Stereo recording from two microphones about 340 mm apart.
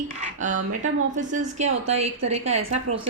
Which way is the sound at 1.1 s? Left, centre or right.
Right.